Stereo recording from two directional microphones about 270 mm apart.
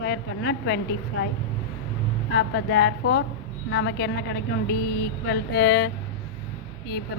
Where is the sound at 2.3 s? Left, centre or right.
Left.